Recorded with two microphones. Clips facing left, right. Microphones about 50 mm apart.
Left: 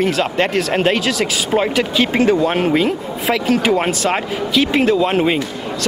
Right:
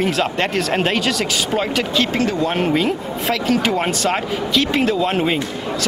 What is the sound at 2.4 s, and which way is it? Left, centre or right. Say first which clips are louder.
Speech: left 3 dB; centre.